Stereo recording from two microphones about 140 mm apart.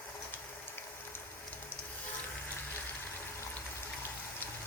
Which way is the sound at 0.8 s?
15° left (ahead or behind).